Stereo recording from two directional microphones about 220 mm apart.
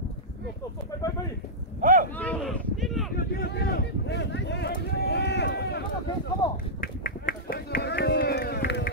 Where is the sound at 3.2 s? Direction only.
45° left (ahead or behind).